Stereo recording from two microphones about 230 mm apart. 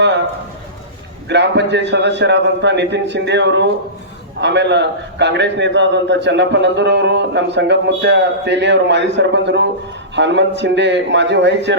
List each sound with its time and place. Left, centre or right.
1.3 s a man's voice: right